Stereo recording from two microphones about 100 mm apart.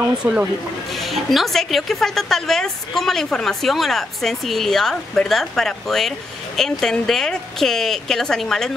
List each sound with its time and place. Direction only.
0.2 s speech: 30° right (ahead or behind)
0.9 s a woman's voice: centre (ahead or behind)